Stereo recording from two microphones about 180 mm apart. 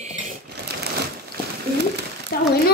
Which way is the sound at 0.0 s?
40° right (ahead or behind).